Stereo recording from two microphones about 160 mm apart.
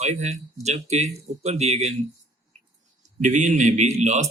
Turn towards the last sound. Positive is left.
turn(degrees=-45)  # may be behind; listen again after turning